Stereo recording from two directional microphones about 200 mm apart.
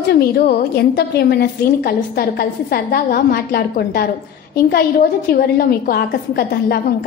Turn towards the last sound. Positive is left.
turn(degrees=50)  # may be behind; listen again after turning